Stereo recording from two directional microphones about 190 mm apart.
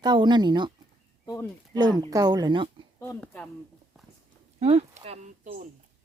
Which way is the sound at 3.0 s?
10° left (ahead or behind).